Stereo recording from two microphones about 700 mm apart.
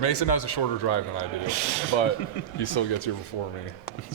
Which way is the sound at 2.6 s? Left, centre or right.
Left.